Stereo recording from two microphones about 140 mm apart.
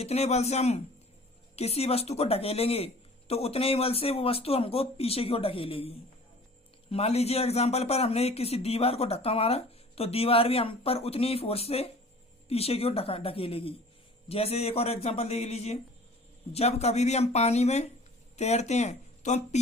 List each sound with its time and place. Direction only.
0.0 s speech: 50° left (ahead or behind)
6.9 s speech: 45° left (ahead or behind)